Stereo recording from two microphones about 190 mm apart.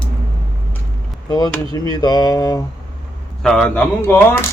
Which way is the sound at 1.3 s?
20° left (ahead or behind).